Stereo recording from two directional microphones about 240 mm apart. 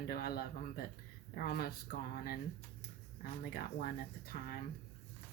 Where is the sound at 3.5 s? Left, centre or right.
Left.